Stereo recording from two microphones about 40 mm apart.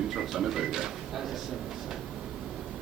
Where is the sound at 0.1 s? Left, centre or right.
Centre.